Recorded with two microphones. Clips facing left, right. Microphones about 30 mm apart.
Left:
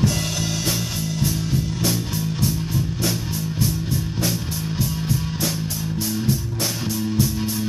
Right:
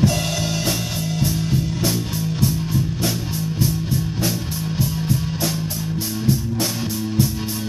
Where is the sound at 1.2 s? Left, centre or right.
Centre.